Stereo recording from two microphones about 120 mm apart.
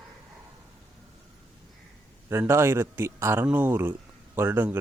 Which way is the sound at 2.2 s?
20° right (ahead or behind).